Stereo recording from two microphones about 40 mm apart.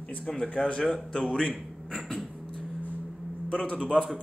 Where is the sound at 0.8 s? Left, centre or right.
Centre.